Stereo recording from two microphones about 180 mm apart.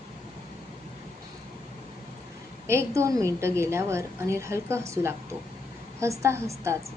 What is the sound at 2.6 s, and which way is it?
A woman's voice, 15° right (ahead or behind).